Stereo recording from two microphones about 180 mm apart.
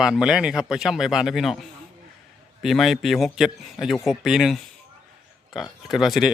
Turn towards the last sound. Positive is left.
turn(degrees=0)  # may be behind; listen again after turning